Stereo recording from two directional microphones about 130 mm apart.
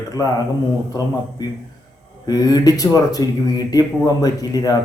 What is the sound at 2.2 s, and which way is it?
Speech, 30° left (ahead or behind).